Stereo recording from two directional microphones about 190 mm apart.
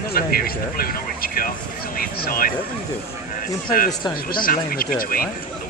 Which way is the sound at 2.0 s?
50° left (ahead or behind).